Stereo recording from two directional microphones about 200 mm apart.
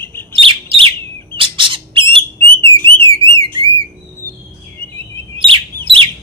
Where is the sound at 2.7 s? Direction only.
10° left (ahead or behind).